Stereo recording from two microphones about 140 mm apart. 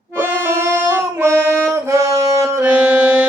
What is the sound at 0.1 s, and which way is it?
Music, 15° right (ahead or behind).